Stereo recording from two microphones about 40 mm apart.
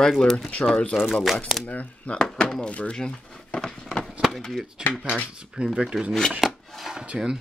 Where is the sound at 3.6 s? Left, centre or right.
Centre.